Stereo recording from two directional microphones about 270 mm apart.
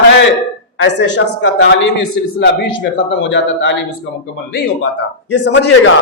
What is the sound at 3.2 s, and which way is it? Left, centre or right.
Speech, left.